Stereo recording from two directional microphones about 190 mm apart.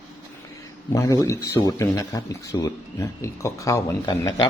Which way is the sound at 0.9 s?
15° left (ahead or behind).